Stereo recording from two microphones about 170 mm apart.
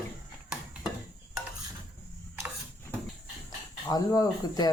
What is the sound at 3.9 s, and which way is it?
Speech, 20° left (ahead or behind).